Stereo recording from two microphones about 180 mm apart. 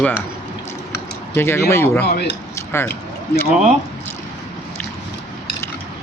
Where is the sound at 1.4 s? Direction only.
15° left (ahead or behind).